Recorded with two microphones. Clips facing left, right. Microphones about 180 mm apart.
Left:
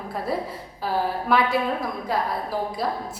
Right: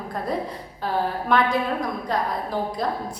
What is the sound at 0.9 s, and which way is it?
A woman's voice, 5° left (ahead or behind).